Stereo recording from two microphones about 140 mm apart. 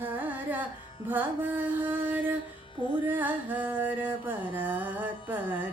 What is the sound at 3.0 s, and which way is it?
Music, 15° right (ahead or behind).